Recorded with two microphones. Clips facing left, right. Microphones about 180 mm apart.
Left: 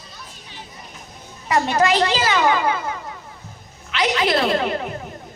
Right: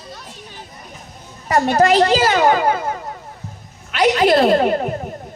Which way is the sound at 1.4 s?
40° right (ahead or behind).